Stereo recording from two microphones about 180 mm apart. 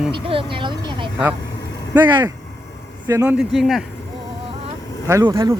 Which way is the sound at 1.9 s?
10° right (ahead or behind).